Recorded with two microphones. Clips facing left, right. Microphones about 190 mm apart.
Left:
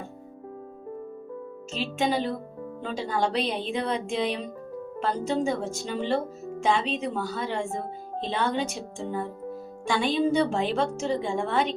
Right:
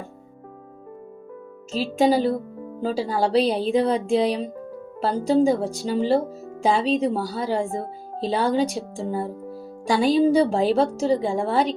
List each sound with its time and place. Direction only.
1.7 s speech: 35° right (ahead or behind)